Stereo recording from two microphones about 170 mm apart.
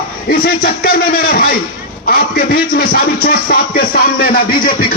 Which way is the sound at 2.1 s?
60° left (ahead or behind).